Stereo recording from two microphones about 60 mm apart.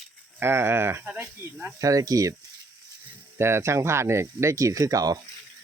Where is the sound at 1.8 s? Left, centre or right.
Right.